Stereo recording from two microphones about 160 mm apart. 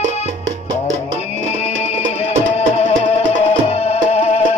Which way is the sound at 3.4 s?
40° left (ahead or behind).